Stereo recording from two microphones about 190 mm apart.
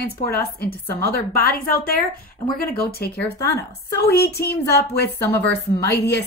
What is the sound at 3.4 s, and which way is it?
Speech, 15° left (ahead or behind).